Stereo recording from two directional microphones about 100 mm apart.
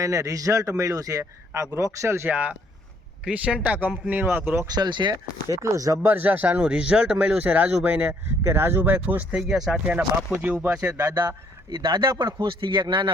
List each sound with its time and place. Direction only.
0.0 s speech: 35° right (ahead or behind)
4.6 s speech: 40° right (ahead or behind)
5.4 s speech: 30° right (ahead or behind)
6.1 s speech: 20° right (ahead or behind)
10.4 s speech: 20° right (ahead or behind)
10.8 s speech: 35° right (ahead or behind); by 13.1 s 50° right (ahead or behind)